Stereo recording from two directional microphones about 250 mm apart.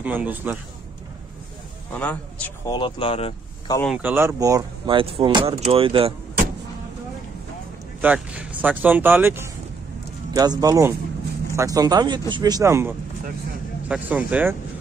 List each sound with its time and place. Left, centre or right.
0.0 s speech: centre
1.9 s speech: centre
2.7 s speech: left
3.8 s speech: centre; by 6.1 s right
8.0 s speech: centre